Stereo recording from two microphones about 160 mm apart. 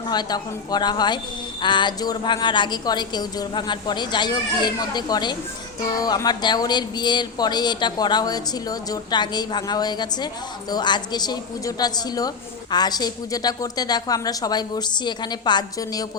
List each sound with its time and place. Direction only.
0.1 s speech: 25° left (ahead or behind)